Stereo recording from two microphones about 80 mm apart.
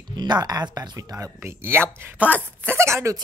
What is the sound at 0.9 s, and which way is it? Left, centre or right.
Speech, right.